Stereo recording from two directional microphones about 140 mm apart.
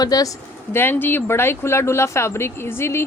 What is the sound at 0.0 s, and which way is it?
Speech, 25° left (ahead or behind).